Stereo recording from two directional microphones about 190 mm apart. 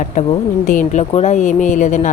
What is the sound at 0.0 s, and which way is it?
Speech, 40° left (ahead or behind).